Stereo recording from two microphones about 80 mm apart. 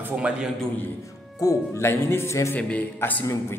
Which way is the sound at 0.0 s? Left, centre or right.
Centre.